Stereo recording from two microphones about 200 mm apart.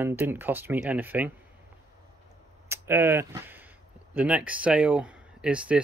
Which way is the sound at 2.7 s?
10° right (ahead or behind).